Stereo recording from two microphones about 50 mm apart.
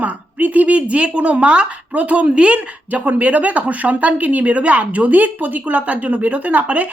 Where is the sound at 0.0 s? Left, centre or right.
Right.